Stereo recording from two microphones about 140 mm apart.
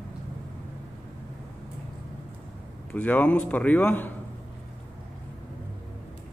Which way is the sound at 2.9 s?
10° left (ahead or behind).